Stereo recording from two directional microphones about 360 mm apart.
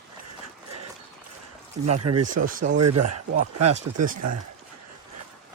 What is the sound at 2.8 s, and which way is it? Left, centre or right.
Speech, right.